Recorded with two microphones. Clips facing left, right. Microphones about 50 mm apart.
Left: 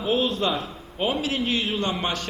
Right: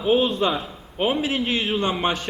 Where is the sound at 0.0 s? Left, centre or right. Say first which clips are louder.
Right 4 dB; centre.